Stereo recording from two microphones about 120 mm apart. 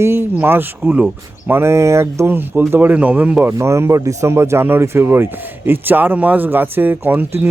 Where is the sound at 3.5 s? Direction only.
25° right (ahead or behind).